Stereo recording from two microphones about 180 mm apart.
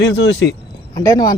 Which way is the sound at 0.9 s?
20° left (ahead or behind).